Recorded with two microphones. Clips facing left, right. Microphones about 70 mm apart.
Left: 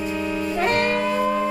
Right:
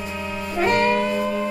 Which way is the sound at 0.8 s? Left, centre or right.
Centre.